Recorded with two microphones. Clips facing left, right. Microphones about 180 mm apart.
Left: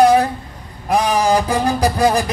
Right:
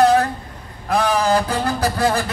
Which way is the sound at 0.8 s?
15° left (ahead or behind).